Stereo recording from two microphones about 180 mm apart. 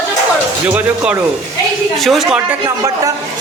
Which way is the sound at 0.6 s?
10° right (ahead or behind).